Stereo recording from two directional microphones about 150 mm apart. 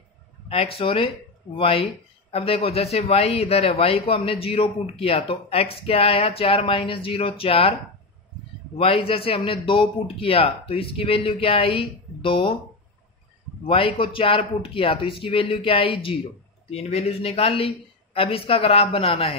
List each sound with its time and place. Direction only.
0.5 s a man's voice: 40° left (ahead or behind)
8.7 s a man's voice: 40° left (ahead or behind)
13.7 s a man's voice: 35° left (ahead or behind)